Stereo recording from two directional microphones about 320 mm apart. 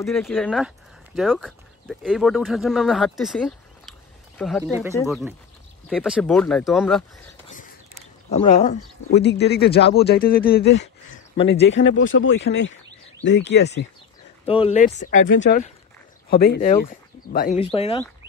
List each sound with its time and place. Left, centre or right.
0.0 s speech: centre
8.3 s speech: centre
9.1 s speech: left
11.3 s speech: centre
11.6 s speech: left
14.4 s speech: centre